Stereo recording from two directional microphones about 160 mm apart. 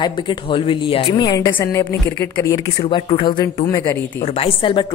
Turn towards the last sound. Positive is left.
turn(degrees=30)  # may be behind; listen again after turning